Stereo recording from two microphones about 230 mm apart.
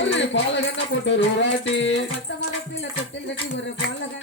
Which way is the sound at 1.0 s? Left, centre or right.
Left.